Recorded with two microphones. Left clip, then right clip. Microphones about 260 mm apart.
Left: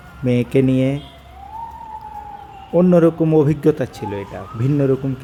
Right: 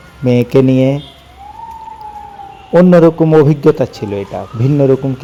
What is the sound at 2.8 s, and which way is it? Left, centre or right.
Speech, centre.